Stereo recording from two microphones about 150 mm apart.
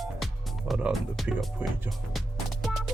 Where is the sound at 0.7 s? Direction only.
Centre (ahead or behind).